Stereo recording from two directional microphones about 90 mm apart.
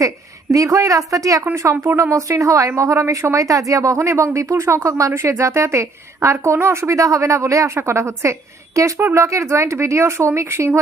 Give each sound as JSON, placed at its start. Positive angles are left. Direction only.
{"t": 0.5, "sound": "speech", "side_deg": -40}